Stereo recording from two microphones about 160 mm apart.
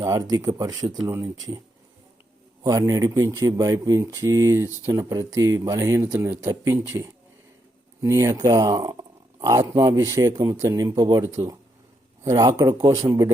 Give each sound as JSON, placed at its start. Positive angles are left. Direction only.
{"t": 0.0, "sound": "speech", "side_deg": -20}
{"t": 2.6, "sound": "speech", "side_deg": -20}